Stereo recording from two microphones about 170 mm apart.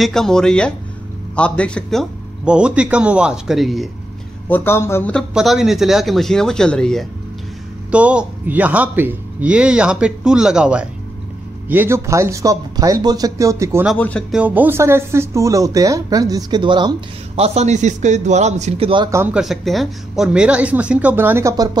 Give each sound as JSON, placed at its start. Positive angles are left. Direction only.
{"t": 0.0, "sound": "speech", "side_deg": 5}
{"t": 4.5, "sound": "a man's voice", "side_deg": 10}
{"t": 5.3, "sound": "a man's voice", "side_deg": 0}
{"t": 13.9, "sound": "a man's voice", "side_deg": 10}
{"t": 14.3, "sound": "speech", "side_deg": -10}
{"t": 17.4, "sound": "a man's voice", "side_deg": -40}
{"t": 19.3, "sound": "a man's voice", "side_deg": 0}